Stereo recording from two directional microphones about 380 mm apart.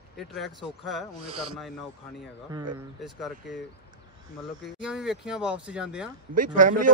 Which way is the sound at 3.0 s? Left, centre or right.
Centre.